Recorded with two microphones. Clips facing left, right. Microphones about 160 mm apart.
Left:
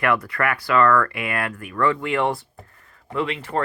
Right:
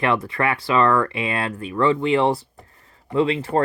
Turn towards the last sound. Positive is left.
turn(degrees=-35)  # may be behind; listen again after turning